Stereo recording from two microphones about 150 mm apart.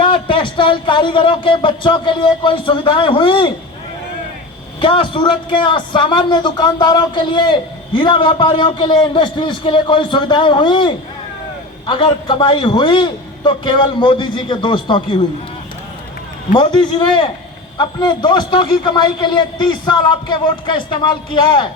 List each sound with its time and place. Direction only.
0.0 s a man's voice: 35° left (ahead or behind)
4.8 s a man's voice: 35° left (ahead or behind)
16.6 s a man's voice: 35° left (ahead or behind)